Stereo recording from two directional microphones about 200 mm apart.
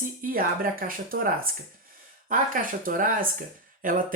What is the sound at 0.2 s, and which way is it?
Speech, 45° right (ahead or behind).